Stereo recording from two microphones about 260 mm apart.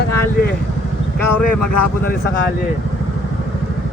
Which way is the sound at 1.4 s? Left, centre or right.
Left.